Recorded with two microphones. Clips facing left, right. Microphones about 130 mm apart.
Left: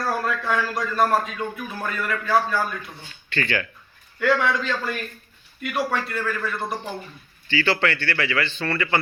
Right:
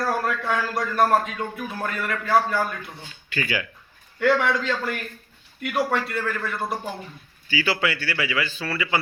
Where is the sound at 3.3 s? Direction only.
10° right (ahead or behind).